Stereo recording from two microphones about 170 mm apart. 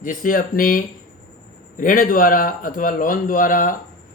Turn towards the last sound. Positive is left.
turn(degrees=55)  # may be behind; listen again after turning